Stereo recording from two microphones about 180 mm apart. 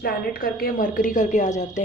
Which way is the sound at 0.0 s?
55° left (ahead or behind).